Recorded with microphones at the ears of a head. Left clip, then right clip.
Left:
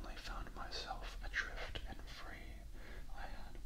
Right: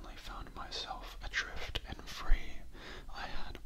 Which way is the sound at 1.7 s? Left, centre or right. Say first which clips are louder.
Right 8 dB; right.